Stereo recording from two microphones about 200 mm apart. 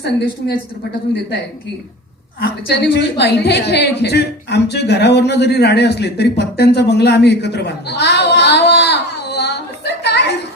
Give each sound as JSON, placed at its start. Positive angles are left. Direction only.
{"t": 0.0, "sound": "a woman's voice", "side_deg": 55}
{"t": 2.4, "sound": "a woman's voice", "side_deg": 50}